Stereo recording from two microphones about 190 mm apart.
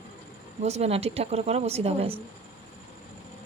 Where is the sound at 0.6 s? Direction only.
35° right (ahead or behind).